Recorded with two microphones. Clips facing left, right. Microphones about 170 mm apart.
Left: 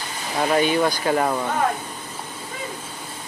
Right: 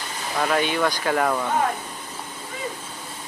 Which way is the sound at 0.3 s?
25° left (ahead or behind).